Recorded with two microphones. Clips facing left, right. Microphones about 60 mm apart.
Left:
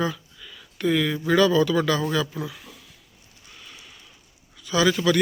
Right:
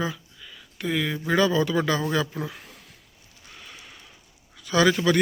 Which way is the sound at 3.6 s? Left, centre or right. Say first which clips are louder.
Right 1 dB; right.